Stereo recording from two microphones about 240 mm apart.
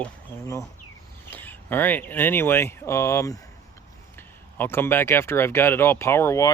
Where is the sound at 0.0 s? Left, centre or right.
Centre.